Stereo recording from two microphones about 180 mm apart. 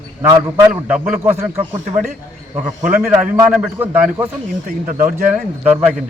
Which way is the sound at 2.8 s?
10° right (ahead or behind).